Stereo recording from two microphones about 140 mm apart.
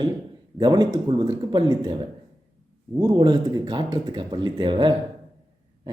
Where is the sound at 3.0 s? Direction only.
30° right (ahead or behind).